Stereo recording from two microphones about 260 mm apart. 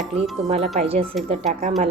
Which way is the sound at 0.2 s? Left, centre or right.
Right.